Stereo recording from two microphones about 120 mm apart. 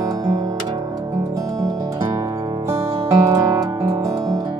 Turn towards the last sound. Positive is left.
turn(degrees=-30)  # may be behind; listen again after turning